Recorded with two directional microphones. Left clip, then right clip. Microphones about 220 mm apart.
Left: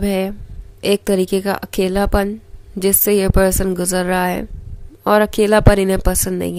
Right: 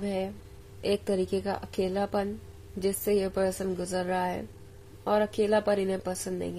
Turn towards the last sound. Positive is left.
turn(degrees=40)  # may be behind; listen again after turning